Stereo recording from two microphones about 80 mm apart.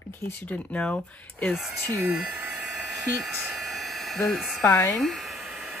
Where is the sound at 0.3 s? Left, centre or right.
Left.